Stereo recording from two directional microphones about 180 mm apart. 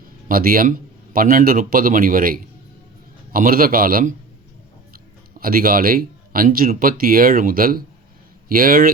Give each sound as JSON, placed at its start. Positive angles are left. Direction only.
{"t": 0.3, "sound": "speech", "side_deg": -55}
{"t": 5.4, "sound": "speech", "side_deg": -55}